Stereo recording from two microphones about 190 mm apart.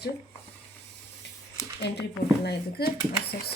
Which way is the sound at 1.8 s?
60° left (ahead or behind).